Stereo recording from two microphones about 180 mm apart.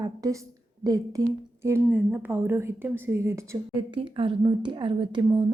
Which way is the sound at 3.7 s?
30° right (ahead or behind).